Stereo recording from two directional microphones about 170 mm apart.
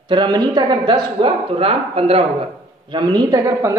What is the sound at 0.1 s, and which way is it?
A man's voice, 25° right (ahead or behind).